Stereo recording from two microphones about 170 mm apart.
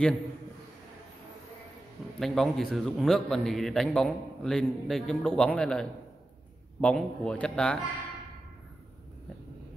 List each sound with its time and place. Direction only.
2.1 s a man's voice: centre (ahead or behind)